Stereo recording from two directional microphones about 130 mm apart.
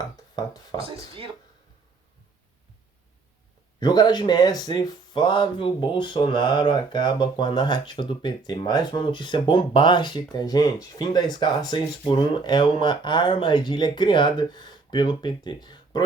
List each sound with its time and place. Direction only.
0.3 s speech: 30° left (ahead or behind)
0.8 s speech: 45° right (ahead or behind)
3.8 s speech: 35° left (ahead or behind)